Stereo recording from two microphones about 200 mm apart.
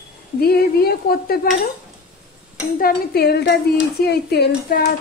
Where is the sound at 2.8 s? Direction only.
50° left (ahead or behind).